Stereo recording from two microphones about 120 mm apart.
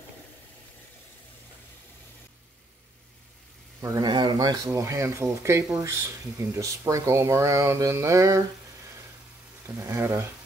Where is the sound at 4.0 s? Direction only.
35° right (ahead or behind).